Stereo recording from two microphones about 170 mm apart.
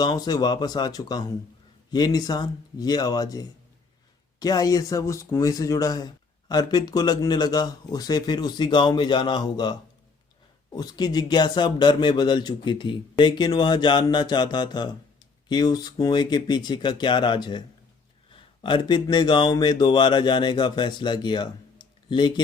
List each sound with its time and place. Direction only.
0.0 s speech: 25° left (ahead or behind)